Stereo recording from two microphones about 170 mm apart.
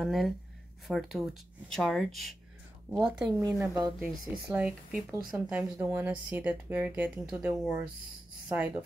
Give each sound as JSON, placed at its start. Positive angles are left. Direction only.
{"t": 0.0, "sound": "speech", "side_deg": 0}
{"t": 3.5, "sound": "speech", "side_deg": -20}
{"t": 4.0, "sound": "speech", "side_deg": -10}